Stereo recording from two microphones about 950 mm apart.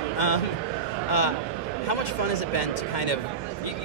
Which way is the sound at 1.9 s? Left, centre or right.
Left.